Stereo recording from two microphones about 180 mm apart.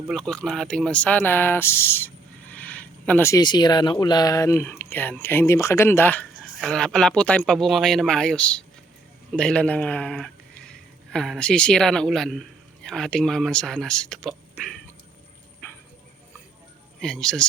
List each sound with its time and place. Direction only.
0.1 s speech: 5° left (ahead or behind)
15.6 s a sound: 15° left (ahead or behind)
17.0 s speech: 5° left (ahead or behind)